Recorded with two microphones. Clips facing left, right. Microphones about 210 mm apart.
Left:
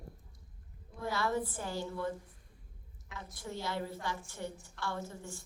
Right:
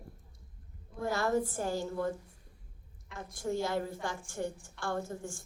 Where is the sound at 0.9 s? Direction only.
45° right (ahead or behind).